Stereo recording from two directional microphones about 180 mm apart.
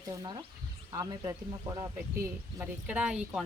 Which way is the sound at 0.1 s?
20° right (ahead or behind).